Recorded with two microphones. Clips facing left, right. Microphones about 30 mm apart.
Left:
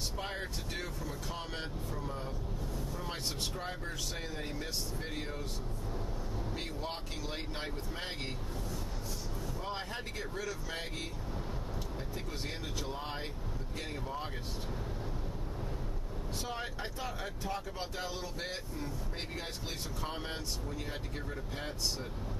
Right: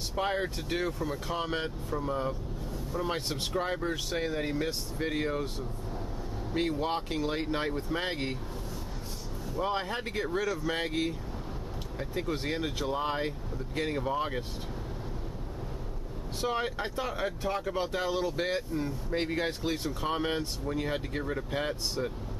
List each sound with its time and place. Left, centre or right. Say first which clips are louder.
0.1 s speech: right 9 dB; right
6.5 s speech: right 14 dB; right
9.6 s speech: right 11 dB; right
12.2 s speech: right 13 dB; right
16.3 s speech: right 9 dB; right